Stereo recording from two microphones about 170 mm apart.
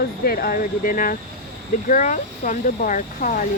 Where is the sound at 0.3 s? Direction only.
60° left (ahead or behind).